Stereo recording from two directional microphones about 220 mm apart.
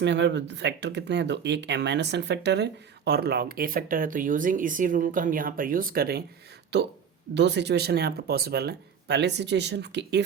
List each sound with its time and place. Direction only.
0.0 s speech: 50° right (ahead or behind)